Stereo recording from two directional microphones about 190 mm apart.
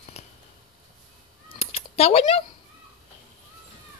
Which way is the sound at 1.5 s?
30° left (ahead or behind).